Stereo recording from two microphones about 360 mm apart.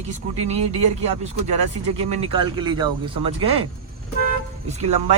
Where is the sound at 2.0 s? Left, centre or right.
Right.